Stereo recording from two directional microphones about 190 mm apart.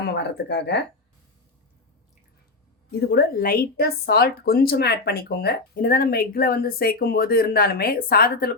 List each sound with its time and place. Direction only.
0.0 s speech: 60° left (ahead or behind)
2.9 s a woman's voice: 60° left (ahead or behind)